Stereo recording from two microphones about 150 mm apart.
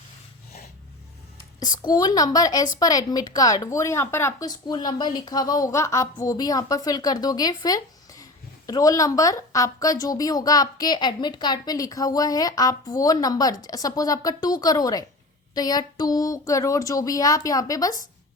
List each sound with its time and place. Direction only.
1.5 s speech: 30° left (ahead or behind)